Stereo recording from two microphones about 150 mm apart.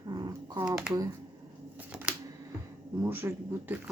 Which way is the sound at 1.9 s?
5° right (ahead or behind).